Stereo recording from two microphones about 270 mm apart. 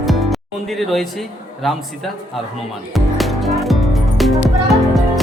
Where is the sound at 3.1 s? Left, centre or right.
Centre.